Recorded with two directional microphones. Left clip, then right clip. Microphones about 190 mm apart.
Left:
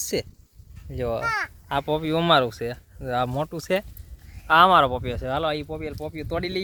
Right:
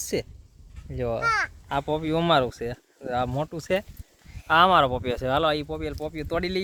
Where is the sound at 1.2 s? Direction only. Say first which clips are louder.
Right 5 dB; 25° right (ahead or behind).